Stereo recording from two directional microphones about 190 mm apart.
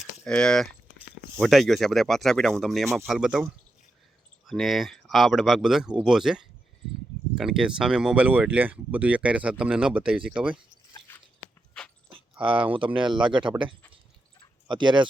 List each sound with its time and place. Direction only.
0.0 s speech: 5° left (ahead or behind)
11.1 s dog: 10° left (ahead or behind)
12.1 s a sound: 25° right (ahead or behind)
12.7 s speech: 25° right (ahead or behind)
14.7 s speech: 25° right (ahead or behind)